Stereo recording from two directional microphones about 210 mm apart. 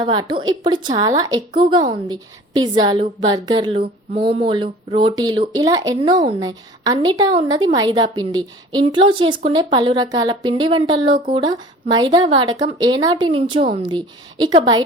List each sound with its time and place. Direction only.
0.0 s a woman's voice: 20° right (ahead or behind)